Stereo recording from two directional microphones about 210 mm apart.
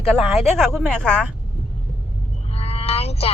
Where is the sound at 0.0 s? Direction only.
Centre (ahead or behind).